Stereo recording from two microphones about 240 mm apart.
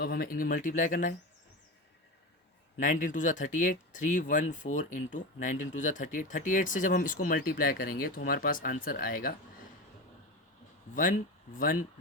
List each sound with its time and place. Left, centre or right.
0.0 s speech: left
2.8 s speech: left
10.9 s speech: left